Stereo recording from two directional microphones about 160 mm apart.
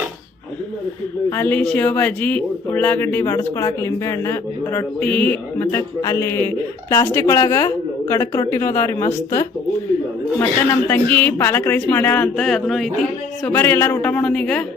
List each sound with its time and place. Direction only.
1.3 s speech: 10° left (ahead or behind)
13.6 s speech: 15° left (ahead or behind)